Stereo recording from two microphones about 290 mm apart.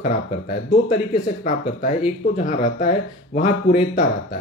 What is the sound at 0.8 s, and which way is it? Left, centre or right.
Speech, left.